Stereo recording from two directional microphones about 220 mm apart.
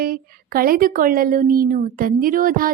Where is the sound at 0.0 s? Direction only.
40° right (ahead or behind).